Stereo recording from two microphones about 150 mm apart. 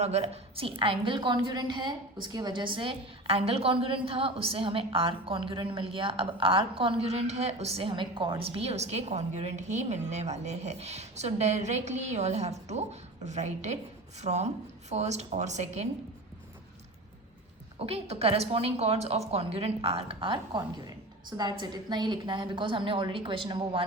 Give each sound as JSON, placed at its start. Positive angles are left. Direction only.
{"t": 0.0, "sound": "a woman's voice", "side_deg": -45}
{"t": 17.7, "sound": "a woman's voice", "side_deg": -40}